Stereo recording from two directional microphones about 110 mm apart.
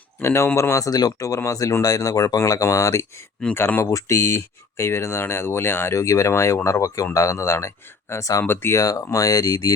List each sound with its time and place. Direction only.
0.2 s speech: 20° left (ahead or behind)